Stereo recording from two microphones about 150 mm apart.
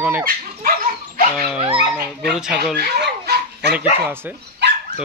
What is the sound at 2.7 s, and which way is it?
Dog, 90° right.